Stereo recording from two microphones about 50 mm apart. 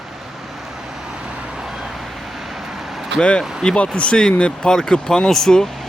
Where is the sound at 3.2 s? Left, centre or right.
Centre.